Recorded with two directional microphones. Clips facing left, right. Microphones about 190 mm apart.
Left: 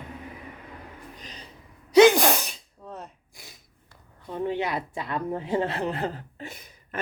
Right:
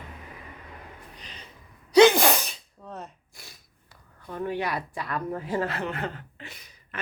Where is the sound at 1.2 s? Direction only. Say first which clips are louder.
Left 3 dB; 40° left (ahead or behind).